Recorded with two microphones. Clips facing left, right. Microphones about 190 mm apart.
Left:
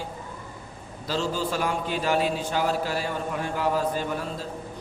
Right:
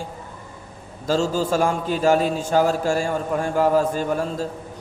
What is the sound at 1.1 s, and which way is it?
A man's voice, 45° right (ahead or behind).